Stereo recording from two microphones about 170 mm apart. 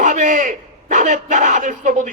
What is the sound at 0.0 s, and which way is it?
A man's voice, 50° right (ahead or behind).